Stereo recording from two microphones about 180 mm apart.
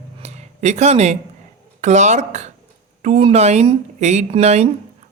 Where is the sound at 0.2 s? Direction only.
40° right (ahead or behind).